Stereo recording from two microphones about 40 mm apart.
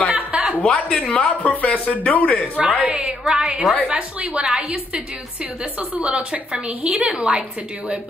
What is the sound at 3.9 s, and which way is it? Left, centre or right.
A woman's voice, right.